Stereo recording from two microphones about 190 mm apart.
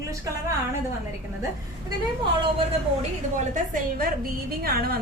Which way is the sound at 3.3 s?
45° right (ahead or behind).